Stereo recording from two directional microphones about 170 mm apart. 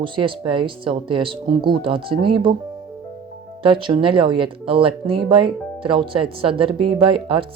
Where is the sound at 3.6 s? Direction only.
30° right (ahead or behind).